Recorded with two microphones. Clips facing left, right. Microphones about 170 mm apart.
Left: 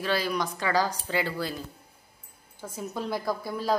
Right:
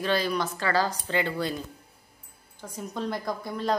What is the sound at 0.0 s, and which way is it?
A woman's voice, 10° left (ahead or behind).